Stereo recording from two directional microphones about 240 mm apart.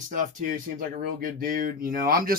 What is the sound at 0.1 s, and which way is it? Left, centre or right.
Speech, right.